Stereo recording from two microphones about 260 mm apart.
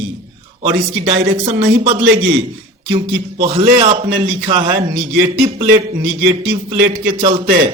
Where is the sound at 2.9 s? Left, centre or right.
Right.